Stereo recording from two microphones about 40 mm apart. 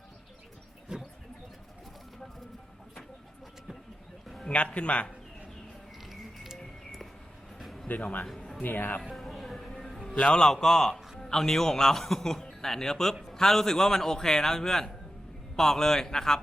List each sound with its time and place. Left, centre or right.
0.9 s a sound: centre
4.4 s a man's voice: left
6.1 s music: centre
7.6 s a sound: centre
8.6 s speech: left
9.1 s music: centre
10.2 s a man's voice: centre